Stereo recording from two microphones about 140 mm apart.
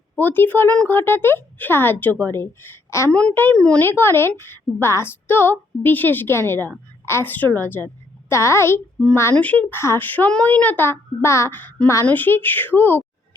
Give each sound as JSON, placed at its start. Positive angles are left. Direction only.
{"t": 0.2, "sound": "a woman's voice", "side_deg": 15}